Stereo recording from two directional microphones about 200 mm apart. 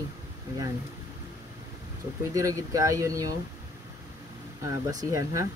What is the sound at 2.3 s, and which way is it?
Speech, 15° right (ahead or behind).